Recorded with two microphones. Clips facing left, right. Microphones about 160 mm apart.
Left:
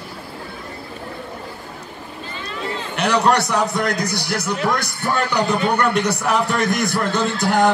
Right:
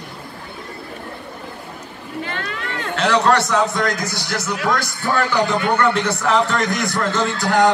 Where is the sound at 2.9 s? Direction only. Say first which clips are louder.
Right 1 dB; 15° left (ahead or behind).